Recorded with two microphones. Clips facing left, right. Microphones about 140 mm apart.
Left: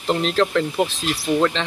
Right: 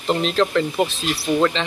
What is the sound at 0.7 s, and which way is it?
Speech, 10° right (ahead or behind).